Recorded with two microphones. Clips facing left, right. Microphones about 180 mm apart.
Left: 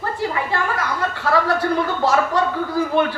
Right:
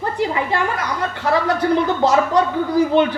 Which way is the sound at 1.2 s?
20° right (ahead or behind).